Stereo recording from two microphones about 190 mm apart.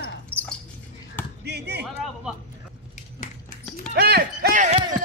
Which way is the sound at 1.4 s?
60° right (ahead or behind).